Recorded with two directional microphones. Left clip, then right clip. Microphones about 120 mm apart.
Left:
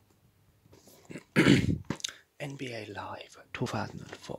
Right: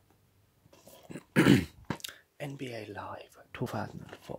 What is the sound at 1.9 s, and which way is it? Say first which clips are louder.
Speech: left 2 dB; centre (ahead or behind).